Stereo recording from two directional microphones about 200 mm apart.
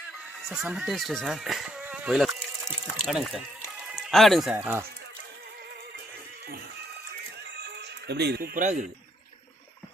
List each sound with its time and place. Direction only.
0.4 s speech: centre (ahead or behind)
2.6 s a sound: 5° right (ahead or behind)
3.9 s speech: centre (ahead or behind)
4.5 s speech: 10° right (ahead or behind)
7.6 s speech: 55° right (ahead or behind); by 8.9 s 40° right (ahead or behind)